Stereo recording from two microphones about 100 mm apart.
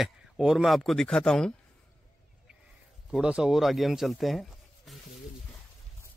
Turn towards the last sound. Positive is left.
turn(degrees=0)  # may be behind; listen again after turning